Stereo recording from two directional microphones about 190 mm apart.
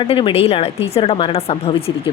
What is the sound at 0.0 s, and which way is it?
A woman's voice, 25° left (ahead or behind).